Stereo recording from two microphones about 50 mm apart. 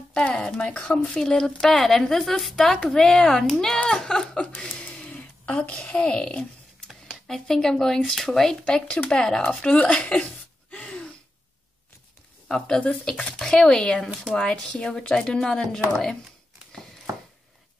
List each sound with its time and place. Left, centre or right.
0.2 s a woman's voice: left
7.2 s a woman's voice: centre
8.6 s a woman's voice: centre
10.7 s a sound: left
12.4 s a woman's voice: centre